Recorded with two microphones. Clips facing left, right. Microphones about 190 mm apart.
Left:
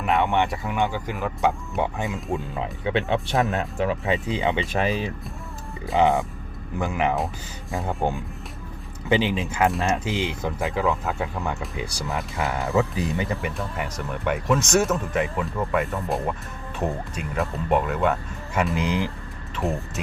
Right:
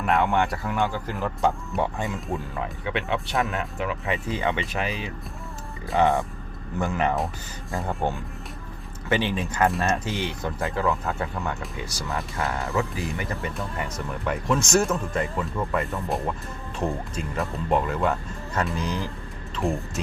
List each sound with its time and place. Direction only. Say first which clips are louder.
0.0 s speech: left 1 dB; centre (ahead or behind)
2.3 s speech: left 2 dB; 20° left (ahead or behind)
3.1 s speech: left 1 dB; 35° left (ahead or behind)
4.0 s speech: left 3 dB; 20° left (ahead or behind)
4.7 s speech: left 5 dB; 35° left (ahead or behind)
6.0 s speech: left 1 dB; 15° left (ahead or behind)
13.4 s speech: left 1 dB; centre (ahead or behind)
18.7 s speech: left 4 dB; 15° left (ahead or behind)
19.6 s speech: even; 5° left (ahead or behind)